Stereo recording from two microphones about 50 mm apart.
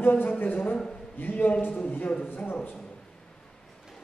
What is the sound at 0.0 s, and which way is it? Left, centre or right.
A man's voice, left.